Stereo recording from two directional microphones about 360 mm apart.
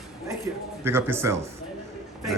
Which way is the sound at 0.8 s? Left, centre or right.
Centre.